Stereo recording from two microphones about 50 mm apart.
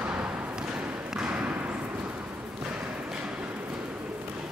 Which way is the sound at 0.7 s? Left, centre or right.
Centre.